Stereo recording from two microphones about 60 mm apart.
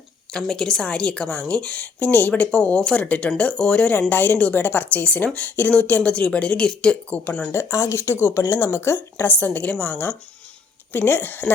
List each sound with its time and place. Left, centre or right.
0.3 s a woman's voice: centre
4.1 s a woman's voice: left; by 7.2 s centre
7.5 s speech: left
10.9 s speech: left